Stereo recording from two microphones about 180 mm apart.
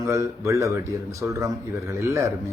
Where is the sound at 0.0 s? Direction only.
15° right (ahead or behind).